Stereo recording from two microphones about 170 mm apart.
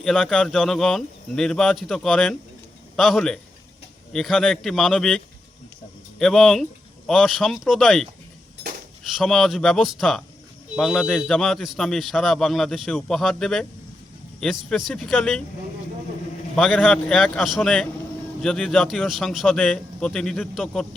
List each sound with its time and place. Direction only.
0.0 s a man's voice: 5° left (ahead or behind)
9.1 s a man's voice: centre (ahead or behind)
14.7 s a man's voice: centre (ahead or behind)
16.6 s a man's voice: 5° left (ahead or behind)